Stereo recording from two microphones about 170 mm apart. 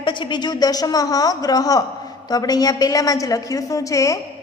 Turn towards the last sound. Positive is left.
turn(degrees=20)  # may be behind; listen again after turning